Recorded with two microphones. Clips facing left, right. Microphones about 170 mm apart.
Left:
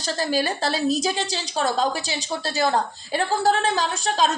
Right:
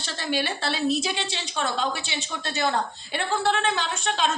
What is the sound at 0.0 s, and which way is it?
A woman's voice, 40° left (ahead or behind).